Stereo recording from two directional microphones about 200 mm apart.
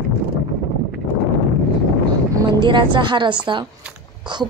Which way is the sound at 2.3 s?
25° right (ahead or behind).